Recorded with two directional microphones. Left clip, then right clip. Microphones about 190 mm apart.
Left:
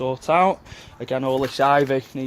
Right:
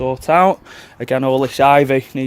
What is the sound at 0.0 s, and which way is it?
Speech, 45° right (ahead or behind).